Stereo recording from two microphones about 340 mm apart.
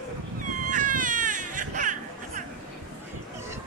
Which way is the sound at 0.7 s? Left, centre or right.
Right.